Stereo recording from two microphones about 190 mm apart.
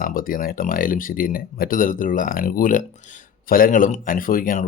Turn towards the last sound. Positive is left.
turn(degrees=45)  # may be behind; listen again after turning